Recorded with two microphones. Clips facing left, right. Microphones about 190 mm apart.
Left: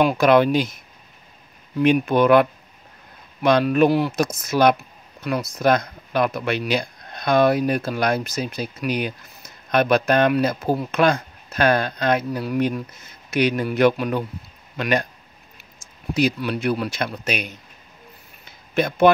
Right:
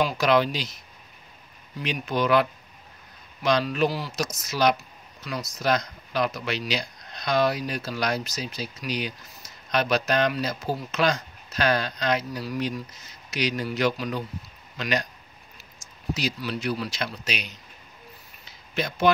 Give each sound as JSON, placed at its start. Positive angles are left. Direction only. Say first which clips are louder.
{"t": 0.0, "sound": "speech", "louder": "left 6 dB", "side_deg": 55}
{"t": 3.4, "sound": "speech", "louder": "left 7 dB", "side_deg": 55}
{"t": 16.1, "sound": "speech", "louder": "left 8 dB", "side_deg": 55}
{"t": 18.4, "sound": "a sound", "louder": "left 8 dB", "side_deg": 55}